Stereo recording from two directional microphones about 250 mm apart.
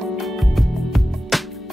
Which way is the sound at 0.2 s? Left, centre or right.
Centre.